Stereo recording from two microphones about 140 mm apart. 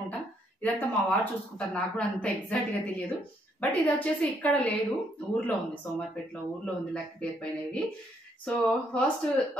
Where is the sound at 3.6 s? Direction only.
10° left (ahead or behind).